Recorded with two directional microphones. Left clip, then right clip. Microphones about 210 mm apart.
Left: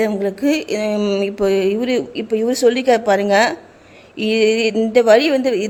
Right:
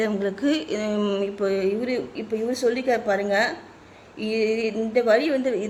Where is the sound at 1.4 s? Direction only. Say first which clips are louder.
Left 8 dB; 35° left (ahead or behind).